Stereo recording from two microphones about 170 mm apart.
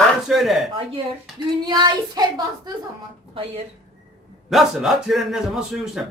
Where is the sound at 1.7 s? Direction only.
25° right (ahead or behind).